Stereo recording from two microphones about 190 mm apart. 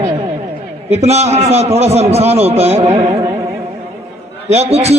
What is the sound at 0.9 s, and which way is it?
A man's voice, 35° right (ahead or behind).